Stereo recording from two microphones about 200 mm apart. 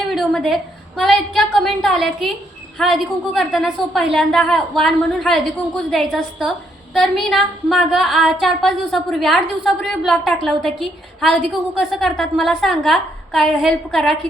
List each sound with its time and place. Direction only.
0.1 s a woman's voice: centre (ahead or behind)